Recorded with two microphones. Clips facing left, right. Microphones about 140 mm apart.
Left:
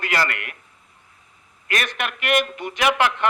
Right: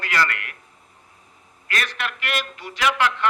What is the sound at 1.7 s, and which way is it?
A man's voice, 20° left (ahead or behind).